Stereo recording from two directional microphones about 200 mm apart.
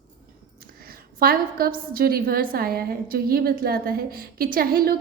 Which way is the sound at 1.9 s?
45° right (ahead or behind).